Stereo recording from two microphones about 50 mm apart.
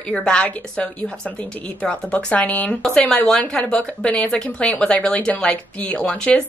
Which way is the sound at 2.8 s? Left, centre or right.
Centre.